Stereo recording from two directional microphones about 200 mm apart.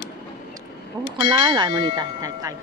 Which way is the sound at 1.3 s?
25° right (ahead or behind).